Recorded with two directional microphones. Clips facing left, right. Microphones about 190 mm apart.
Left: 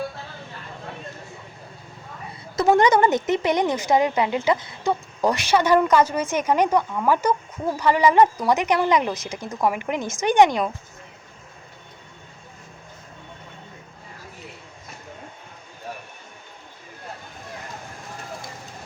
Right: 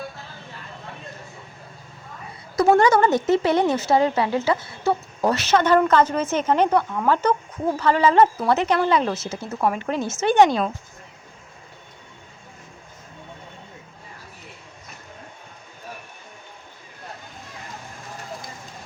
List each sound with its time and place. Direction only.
2.6 s speech: 20° left (ahead or behind)